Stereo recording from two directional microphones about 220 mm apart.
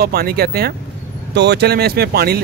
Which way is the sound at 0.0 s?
45° right (ahead or behind).